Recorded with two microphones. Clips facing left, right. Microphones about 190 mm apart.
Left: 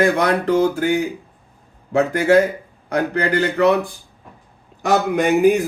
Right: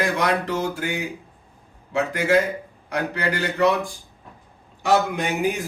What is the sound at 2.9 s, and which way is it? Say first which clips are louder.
Speech: left 6 dB; 60° left (ahead or behind).